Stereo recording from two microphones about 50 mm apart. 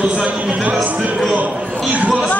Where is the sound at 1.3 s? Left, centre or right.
Right.